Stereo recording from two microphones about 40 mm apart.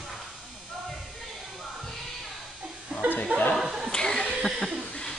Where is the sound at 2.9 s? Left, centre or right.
Centre.